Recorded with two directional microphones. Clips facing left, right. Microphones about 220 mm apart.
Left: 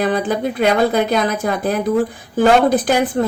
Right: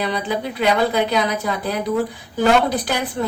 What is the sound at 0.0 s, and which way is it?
Speech, 50° left (ahead or behind).